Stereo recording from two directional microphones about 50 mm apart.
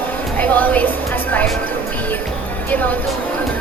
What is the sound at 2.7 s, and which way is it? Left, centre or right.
Speech, left.